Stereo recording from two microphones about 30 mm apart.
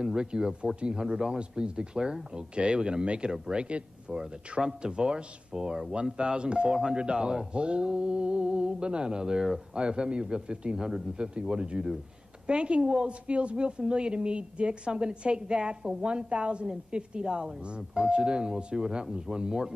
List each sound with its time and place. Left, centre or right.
0.0 s a man's voice: right
4.6 s a man's voice: right
6.7 s a man's voice: right